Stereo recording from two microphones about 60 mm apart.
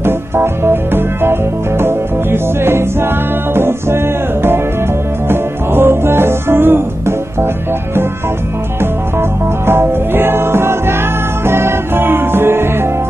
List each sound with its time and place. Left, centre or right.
0.0 s music: right
9.7 s music: right